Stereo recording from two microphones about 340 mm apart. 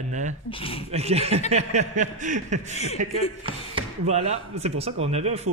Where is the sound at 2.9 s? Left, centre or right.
Centre.